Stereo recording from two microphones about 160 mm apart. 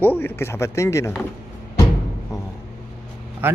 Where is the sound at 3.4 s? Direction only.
10° right (ahead or behind).